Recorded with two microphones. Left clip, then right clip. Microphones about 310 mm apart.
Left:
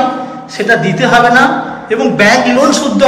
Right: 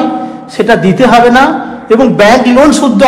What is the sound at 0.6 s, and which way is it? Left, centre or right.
A woman's voice, centre.